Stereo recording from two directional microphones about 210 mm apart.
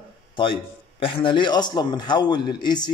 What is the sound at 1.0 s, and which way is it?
Speech, 25° left (ahead or behind).